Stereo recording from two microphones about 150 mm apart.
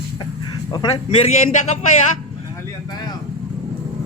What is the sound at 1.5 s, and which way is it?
Speech, 55° left (ahead or behind).